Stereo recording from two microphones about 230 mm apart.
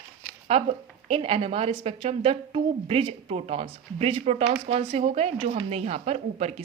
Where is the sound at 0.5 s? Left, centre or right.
Right.